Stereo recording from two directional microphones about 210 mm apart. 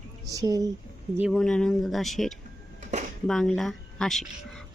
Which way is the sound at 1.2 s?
Centre (ahead or behind).